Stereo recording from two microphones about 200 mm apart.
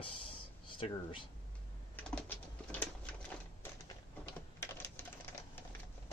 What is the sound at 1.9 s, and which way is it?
Typing, 5° left (ahead or behind).